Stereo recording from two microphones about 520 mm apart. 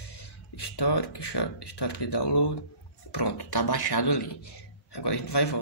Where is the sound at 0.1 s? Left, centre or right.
Left.